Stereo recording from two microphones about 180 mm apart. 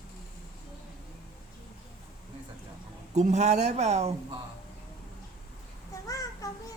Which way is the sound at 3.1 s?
40° right (ahead or behind).